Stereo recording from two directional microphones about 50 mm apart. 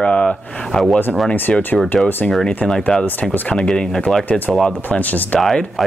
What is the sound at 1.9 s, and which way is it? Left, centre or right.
Speech, left.